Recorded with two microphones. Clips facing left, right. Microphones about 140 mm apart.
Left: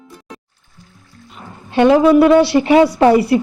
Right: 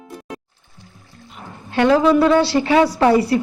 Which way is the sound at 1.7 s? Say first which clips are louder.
Left 4 dB; 20° left (ahead or behind).